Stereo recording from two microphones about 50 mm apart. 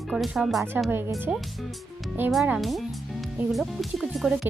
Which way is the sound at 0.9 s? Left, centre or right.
Right.